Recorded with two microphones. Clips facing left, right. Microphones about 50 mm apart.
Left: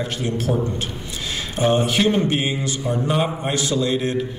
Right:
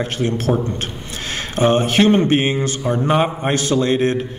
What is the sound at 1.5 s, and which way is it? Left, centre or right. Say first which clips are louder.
Speech: right 4 dB; right.